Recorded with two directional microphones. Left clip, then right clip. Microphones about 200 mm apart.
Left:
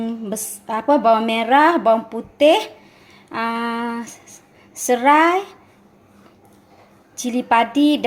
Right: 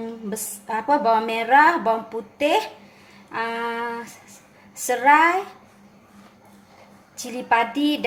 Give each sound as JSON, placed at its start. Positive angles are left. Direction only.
{"t": 0.0, "sound": "a woman's voice", "side_deg": 35}
{"t": 7.2, "sound": "a woman's voice", "side_deg": 40}